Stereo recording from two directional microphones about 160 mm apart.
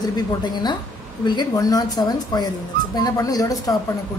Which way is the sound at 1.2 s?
25° left (ahead or behind).